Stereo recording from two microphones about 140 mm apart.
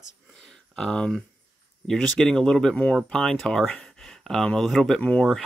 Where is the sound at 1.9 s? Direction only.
5° left (ahead or behind).